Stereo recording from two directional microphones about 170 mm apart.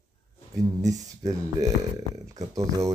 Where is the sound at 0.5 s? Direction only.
20° right (ahead or behind).